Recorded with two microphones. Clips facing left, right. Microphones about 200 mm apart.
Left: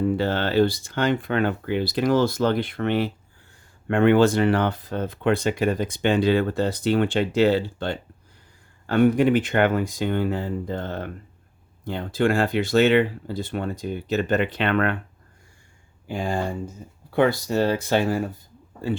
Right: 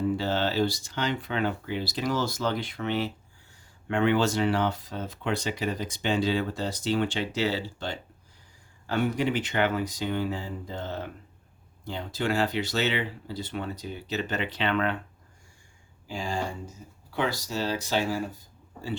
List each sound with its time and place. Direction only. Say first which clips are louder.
0.0 s speech: left 4 dB; 55° left (ahead or behind)
16.0 s speech: left 5 dB; 55° left (ahead or behind)